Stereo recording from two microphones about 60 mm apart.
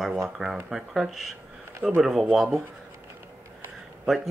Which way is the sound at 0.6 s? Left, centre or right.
Centre.